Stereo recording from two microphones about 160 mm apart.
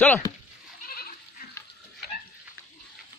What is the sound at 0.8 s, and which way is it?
Goat, 65° left (ahead or behind).